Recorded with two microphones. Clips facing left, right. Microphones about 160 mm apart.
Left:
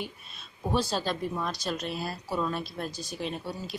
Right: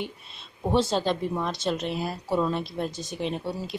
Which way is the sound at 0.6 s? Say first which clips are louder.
Right 5 dB; 25° right (ahead or behind).